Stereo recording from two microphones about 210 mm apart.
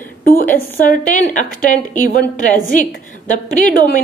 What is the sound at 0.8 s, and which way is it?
A woman's voice, 40° left (ahead or behind).